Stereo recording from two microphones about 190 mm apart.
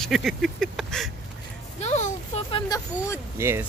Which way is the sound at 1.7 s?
35° left (ahead or behind).